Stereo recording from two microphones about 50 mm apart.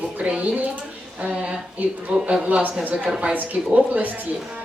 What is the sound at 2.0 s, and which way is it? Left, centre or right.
Speech, right.